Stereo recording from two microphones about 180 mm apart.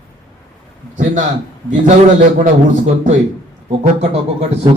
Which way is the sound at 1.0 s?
45° right (ahead or behind).